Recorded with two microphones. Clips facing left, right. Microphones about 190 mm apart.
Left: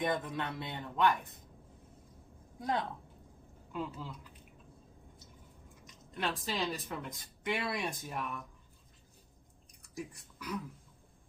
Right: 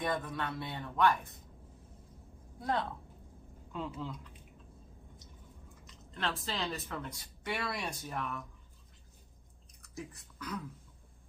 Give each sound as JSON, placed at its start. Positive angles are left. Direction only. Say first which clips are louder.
{"t": 0.0, "sound": "speech", "louder": "left 1 dB", "side_deg": 20}
{"t": 2.6, "sound": "speech", "louder": "even", "side_deg": 15}
{"t": 3.7, "sound": "speech", "louder": "even", "side_deg": 5}
{"t": 5.8, "sound": "speech", "louder": "left 1 dB", "side_deg": 15}
{"t": 9.9, "sound": "speech", "louder": "left 2 dB", "side_deg": 10}